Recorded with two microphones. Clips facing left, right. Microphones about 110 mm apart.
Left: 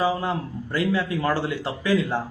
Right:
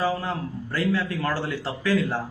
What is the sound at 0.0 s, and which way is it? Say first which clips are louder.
A man's voice: left 2 dB; 15° left (ahead or behind).